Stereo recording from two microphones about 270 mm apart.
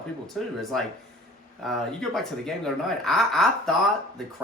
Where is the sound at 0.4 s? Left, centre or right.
Centre.